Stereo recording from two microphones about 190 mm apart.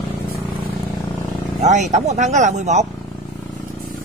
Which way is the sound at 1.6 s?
35° right (ahead or behind).